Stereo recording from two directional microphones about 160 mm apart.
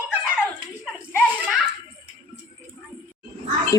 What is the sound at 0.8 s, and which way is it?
Children playing, 5° right (ahead or behind).